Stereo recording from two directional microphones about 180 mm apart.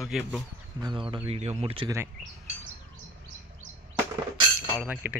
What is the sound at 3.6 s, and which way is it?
Music, 90° right.